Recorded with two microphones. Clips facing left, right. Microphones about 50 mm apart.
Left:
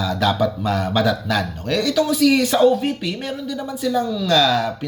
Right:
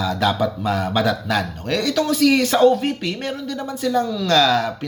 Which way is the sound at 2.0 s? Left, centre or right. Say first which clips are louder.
Even; right.